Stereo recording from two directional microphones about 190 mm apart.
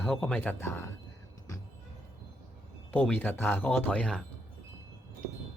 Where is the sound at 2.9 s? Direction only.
10° left (ahead or behind).